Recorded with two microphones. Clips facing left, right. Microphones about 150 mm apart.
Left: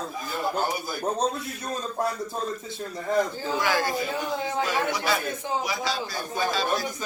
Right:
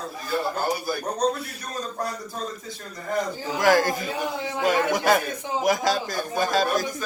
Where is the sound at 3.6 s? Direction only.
45° right (ahead or behind).